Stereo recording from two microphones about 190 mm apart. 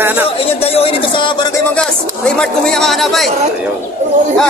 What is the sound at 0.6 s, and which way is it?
Speech, 30° left (ahead or behind).